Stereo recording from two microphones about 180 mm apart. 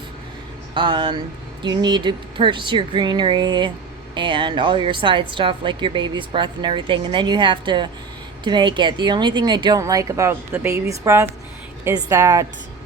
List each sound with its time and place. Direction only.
0.7 s a woman's voice: 25° right (ahead or behind)